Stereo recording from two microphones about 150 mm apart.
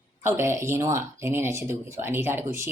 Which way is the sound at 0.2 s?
15° right (ahead or behind).